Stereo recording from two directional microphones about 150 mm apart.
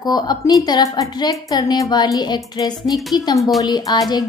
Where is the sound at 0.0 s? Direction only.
25° left (ahead or behind).